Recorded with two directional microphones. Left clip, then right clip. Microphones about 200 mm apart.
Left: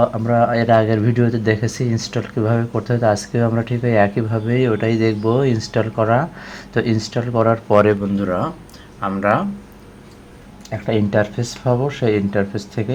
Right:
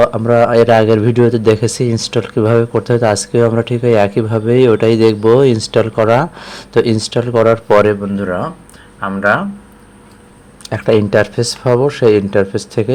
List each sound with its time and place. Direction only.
0.1 s speech: 20° right (ahead or behind)
10.7 s speech: 25° right (ahead or behind)